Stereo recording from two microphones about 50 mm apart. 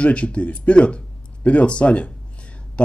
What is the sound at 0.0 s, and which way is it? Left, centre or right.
Speech, left.